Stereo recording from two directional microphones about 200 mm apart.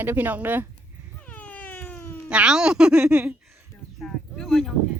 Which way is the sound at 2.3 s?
5° right (ahead or behind).